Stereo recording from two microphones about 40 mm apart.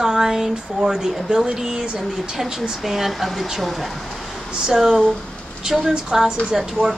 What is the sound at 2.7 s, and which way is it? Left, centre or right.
Speech, centre.